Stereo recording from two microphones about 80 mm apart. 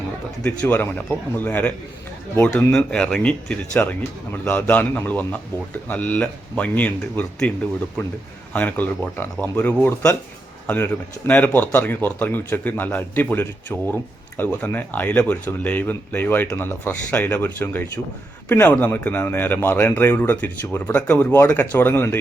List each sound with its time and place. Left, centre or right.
0.4 s speech: centre
2.7 s speech: centre; by 22.2 s left